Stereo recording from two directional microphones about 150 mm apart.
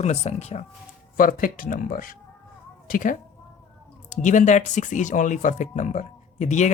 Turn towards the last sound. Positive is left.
turn(degrees=50)  # may be behind; listen again after turning